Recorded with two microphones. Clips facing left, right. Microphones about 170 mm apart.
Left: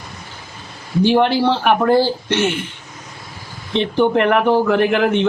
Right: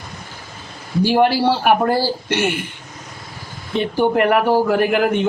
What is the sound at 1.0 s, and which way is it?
Speech, 5° right (ahead or behind).